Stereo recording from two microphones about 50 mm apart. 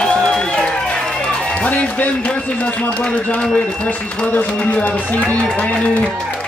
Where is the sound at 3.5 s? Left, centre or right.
Left.